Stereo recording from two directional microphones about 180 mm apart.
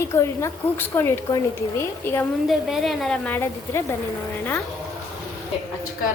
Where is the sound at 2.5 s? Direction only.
Centre (ahead or behind).